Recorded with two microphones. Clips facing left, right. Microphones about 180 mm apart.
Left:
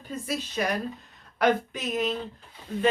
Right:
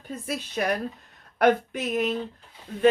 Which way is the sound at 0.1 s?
55° right (ahead or behind).